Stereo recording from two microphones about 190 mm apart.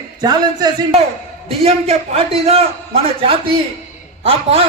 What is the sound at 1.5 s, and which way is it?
A man's voice, 35° right (ahead or behind).